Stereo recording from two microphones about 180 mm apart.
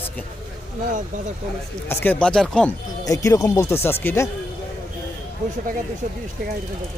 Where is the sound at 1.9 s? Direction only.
10° left (ahead or behind).